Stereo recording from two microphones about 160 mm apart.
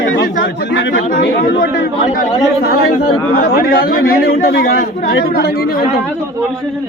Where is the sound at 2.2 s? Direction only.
75° left (ahead or behind).